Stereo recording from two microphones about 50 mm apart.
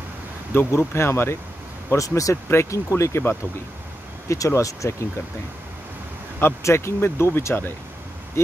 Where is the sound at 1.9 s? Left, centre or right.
Left.